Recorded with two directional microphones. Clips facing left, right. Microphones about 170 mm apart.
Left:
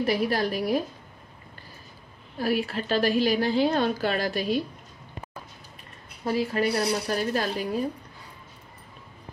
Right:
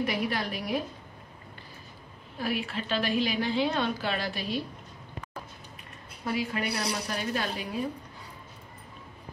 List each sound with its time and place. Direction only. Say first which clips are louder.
0.0 s a woman's voice: left 5 dB; 40° left (ahead or behind)
2.3 s a woman's voice: left 5 dB; 40° left (ahead or behind)
6.2 s a woman's voice: left 6 dB; 35° left (ahead or behind)